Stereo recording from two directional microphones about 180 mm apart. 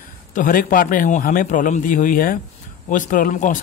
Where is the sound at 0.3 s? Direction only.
50° left (ahead or behind).